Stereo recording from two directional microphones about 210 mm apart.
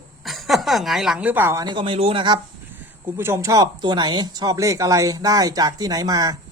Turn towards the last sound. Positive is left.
turn(degrees=-15)  # may be behind; listen again after turning